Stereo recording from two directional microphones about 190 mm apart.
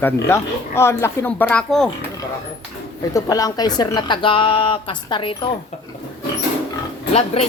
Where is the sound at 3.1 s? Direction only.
20° left (ahead or behind).